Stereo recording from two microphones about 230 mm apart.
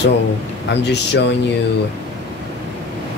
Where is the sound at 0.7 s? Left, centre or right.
Left.